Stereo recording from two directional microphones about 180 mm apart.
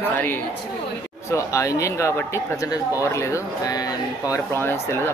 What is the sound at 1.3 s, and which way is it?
Speech, 15° left (ahead or behind).